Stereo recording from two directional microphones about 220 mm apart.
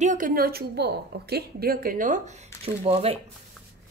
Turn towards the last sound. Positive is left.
turn(degrees=-25)  # may be behind; listen again after turning